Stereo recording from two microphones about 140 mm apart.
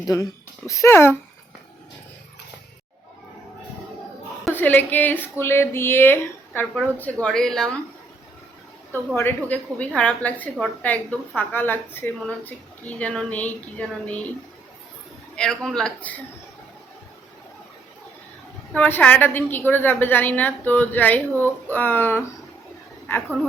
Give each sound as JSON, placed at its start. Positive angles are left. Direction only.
{"t": 0.1, "sound": "a woman's voice", "side_deg": 25}
{"t": 4.6, "sound": "a woman's voice", "side_deg": 10}
{"t": 8.9, "sound": "a woman's voice", "side_deg": 15}
{"t": 15.4, "sound": "a man's voice", "side_deg": 5}
{"t": 18.7, "sound": "a woman's voice", "side_deg": 10}